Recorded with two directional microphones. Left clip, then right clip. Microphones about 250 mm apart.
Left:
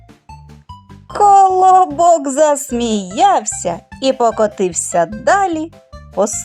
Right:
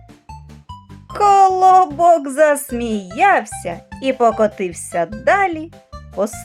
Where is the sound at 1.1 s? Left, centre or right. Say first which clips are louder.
Left 3 dB; centre.